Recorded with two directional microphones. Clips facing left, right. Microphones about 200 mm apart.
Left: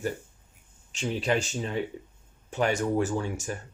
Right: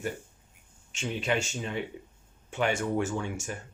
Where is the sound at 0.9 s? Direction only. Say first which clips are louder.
Left 3 dB; 35° left (ahead or behind).